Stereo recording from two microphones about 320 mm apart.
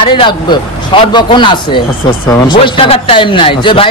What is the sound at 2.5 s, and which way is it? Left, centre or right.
A man's voice, centre.